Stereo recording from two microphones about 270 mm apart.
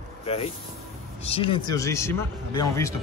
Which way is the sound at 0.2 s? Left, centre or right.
Left.